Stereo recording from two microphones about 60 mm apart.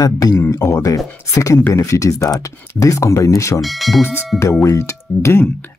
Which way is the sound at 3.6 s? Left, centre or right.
Centre.